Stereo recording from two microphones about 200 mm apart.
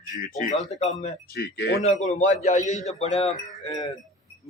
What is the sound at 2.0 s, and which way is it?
A man's voice, 35° left (ahead or behind).